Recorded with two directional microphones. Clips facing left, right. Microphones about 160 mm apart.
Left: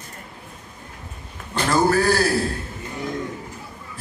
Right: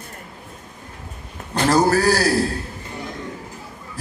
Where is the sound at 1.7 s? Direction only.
40° right (ahead or behind).